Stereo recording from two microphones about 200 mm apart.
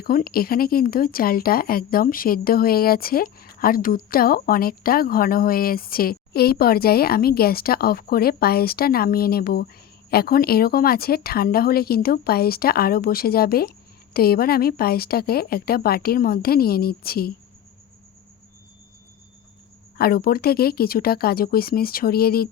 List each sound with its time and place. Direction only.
0.0 s speech: 45° left (ahead or behind)
20.0 s speech: 50° left (ahead or behind)